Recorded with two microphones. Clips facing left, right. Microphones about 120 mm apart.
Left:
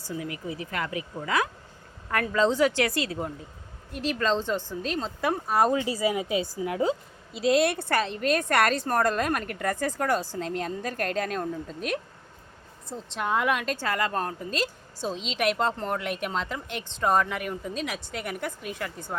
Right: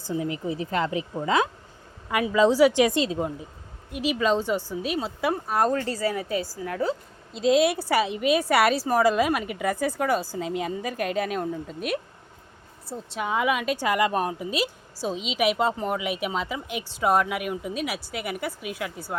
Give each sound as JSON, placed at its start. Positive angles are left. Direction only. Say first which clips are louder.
{"t": 0.1, "sound": "speech", "louder": "right 6 dB", "side_deg": -25}
{"t": 2.0, "sound": "a woman's voice", "louder": "right 4 dB", "side_deg": -10}
{"t": 7.3, "sound": "a woman's voice", "louder": "right 2 dB", "side_deg": 0}